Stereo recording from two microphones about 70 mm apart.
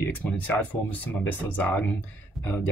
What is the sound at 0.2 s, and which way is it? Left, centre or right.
Speech, left.